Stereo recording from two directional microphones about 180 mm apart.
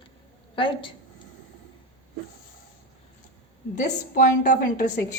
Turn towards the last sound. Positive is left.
turn(degrees=45)  # may be behind; listen again after turning